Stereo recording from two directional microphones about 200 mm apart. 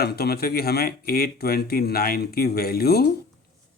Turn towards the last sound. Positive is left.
turn(degrees=50)  # may be behind; listen again after turning